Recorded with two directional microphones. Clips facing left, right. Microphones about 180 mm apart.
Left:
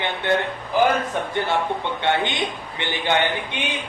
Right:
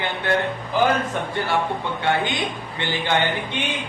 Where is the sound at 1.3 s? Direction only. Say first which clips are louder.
Even; 20° left (ahead or behind).